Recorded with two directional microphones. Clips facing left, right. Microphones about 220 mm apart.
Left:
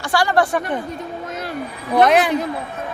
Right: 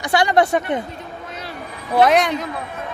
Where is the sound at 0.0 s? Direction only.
20° right (ahead or behind).